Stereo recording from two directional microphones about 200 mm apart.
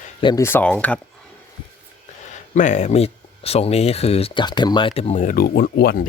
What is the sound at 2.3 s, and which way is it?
Speech, 35° left (ahead or behind).